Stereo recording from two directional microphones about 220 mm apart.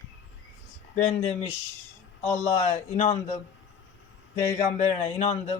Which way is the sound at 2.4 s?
30° left (ahead or behind).